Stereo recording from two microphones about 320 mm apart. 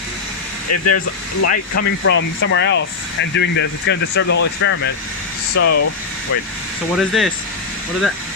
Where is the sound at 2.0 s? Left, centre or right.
Left.